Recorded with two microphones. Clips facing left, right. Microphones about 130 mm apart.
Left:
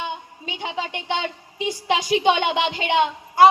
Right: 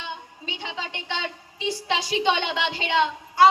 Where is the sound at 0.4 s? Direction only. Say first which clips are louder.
Left 4 dB; 15° left (ahead or behind).